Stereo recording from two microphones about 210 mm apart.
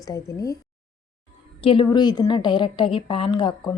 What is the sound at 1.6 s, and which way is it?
A woman's voice, 25° left (ahead or behind).